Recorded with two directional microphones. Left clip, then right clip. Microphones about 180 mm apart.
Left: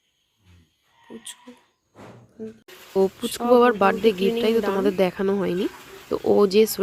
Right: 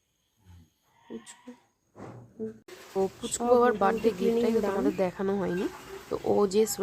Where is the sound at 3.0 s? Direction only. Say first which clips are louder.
Left 7 dB; 25° left (ahead or behind).